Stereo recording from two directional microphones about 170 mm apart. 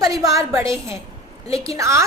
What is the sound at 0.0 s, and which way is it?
A woman's voice, 20° right (ahead or behind).